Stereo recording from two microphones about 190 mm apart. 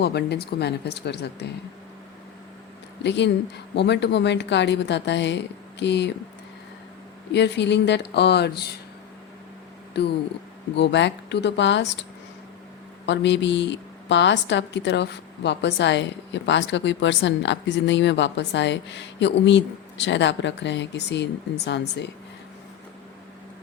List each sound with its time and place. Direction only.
0.0 s speech: 60° left (ahead or behind)
3.0 s a woman's voice: 65° left (ahead or behind)
7.3 s speech: 65° left (ahead or behind)
10.0 s a woman's voice: 60° left (ahead or behind)
13.1 s a woman's voice: 70° left (ahead or behind)